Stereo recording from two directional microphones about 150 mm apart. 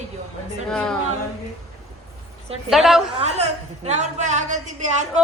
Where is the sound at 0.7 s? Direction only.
5° left (ahead or behind).